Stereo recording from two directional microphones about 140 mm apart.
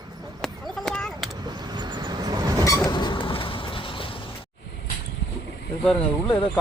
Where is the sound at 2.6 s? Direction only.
25° left (ahead or behind).